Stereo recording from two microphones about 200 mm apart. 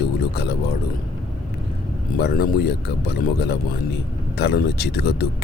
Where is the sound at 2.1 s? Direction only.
50° left (ahead or behind).